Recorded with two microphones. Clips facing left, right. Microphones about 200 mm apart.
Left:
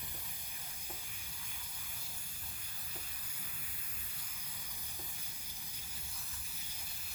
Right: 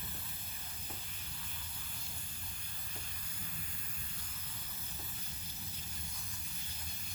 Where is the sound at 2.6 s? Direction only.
10° left (ahead or behind).